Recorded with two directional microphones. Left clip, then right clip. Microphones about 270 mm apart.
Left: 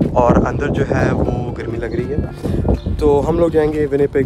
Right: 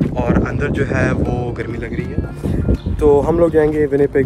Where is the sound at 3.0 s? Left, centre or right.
Centre.